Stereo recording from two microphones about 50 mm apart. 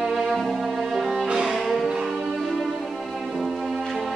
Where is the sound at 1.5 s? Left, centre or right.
Centre.